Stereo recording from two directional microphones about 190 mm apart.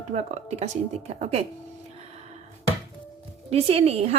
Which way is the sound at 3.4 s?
30° right (ahead or behind).